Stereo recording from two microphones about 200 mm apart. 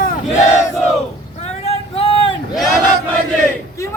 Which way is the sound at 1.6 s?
30° left (ahead or behind).